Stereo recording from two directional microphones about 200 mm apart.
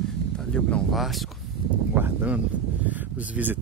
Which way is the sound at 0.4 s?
5° left (ahead or behind).